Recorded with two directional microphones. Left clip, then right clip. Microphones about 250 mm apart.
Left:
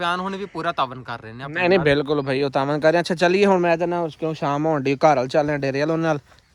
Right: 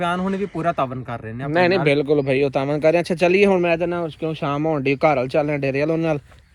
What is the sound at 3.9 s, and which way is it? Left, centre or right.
Speech, left.